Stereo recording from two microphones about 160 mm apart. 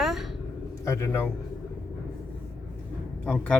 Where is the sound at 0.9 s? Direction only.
20° left (ahead or behind).